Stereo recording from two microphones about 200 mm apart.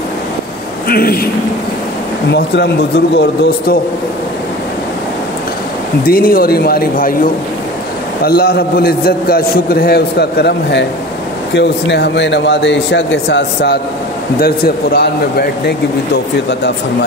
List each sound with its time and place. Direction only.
0.8 s a man's voice: 50° left (ahead or behind)
2.3 s a man's voice: 60° left (ahead or behind)
6.0 s a man's voice: 45° left (ahead or behind)
8.2 s a man's voice: 50° left (ahead or behind)